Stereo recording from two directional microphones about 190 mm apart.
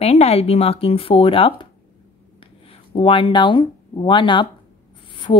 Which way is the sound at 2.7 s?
30° left (ahead or behind).